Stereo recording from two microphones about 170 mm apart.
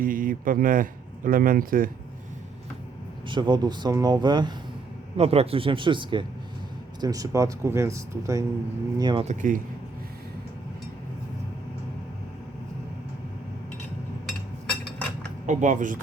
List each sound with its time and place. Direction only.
0.0 s speech: 55° right (ahead or behind)
3.2 s speech: 25° right (ahead or behind)
5.1 s speech: 35° right (ahead or behind)
9.2 s speech: 45° right (ahead or behind)
15.4 s speech: 50° right (ahead or behind)